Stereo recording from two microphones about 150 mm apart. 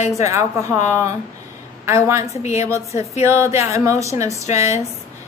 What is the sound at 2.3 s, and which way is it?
Speech, 45° left (ahead or behind).